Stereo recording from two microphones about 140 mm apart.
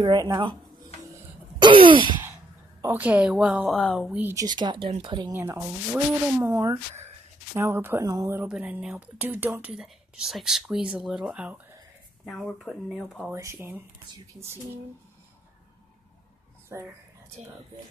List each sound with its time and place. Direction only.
0.0 s speech: 25° right (ahead or behind)
1.6 s speech: 35° right (ahead or behind)
2.9 s speech: 10° right (ahead or behind)
4.1 s speech: 15° right (ahead or behind)
4.4 s speech: 30° right (ahead or behind)
5.3 s speech: 15° right (ahead or behind)
8.5 s speech: 10° right (ahead or behind)
13.3 s speech: 20° right (ahead or behind)
16.7 s speech: 20° right (ahead or behind)